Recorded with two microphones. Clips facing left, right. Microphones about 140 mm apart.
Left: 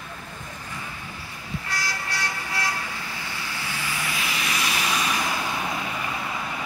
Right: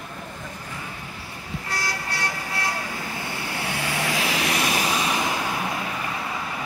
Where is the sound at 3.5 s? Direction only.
65° right (ahead or behind).